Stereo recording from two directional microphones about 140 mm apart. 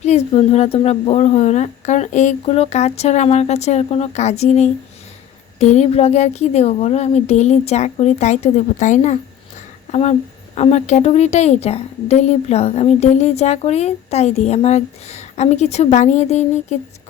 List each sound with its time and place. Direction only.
0.0 s a woman's voice: 50° left (ahead or behind)